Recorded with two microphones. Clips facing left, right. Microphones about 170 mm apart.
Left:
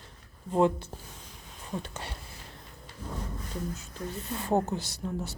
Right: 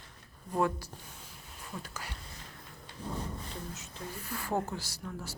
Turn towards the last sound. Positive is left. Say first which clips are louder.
# left 7 dB
turn(degrees=20)  # may be behind; listen again after turning